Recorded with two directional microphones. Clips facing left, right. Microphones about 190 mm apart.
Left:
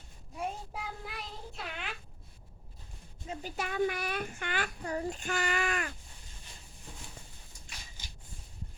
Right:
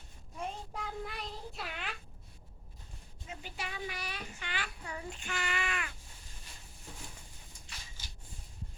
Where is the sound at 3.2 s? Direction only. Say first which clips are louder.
Left 6 dB; 45° left (ahead or behind).